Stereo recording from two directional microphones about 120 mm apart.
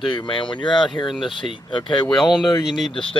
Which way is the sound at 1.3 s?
45° left (ahead or behind).